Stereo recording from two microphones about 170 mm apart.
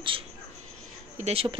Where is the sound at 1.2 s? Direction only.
35° right (ahead or behind).